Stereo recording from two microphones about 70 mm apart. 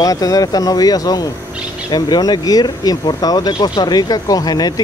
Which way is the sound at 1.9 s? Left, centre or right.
Left.